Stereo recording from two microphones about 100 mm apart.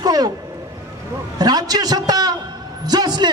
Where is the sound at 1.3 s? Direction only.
40° right (ahead or behind).